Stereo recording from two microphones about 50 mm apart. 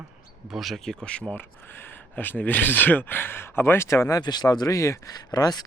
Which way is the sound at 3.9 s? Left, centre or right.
Left.